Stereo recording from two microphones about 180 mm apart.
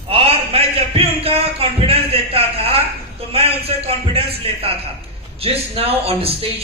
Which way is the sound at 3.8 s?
35° right (ahead or behind).